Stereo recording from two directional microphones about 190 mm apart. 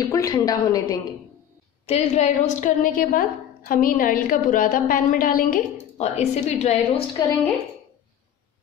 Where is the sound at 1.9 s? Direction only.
40° left (ahead or behind).